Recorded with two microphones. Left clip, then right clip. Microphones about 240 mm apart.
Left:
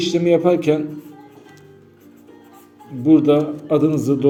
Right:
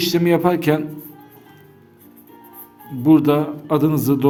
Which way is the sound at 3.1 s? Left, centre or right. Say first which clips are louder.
Left 1 dB; right.